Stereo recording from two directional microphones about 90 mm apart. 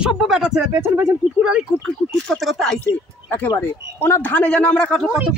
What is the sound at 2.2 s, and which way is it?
Speech, 5° left (ahead or behind).